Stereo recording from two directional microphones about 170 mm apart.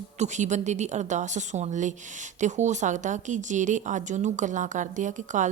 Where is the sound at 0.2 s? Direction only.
45° right (ahead or behind).